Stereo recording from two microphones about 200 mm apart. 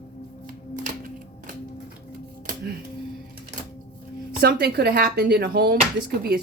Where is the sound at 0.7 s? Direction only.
40° right (ahead or behind).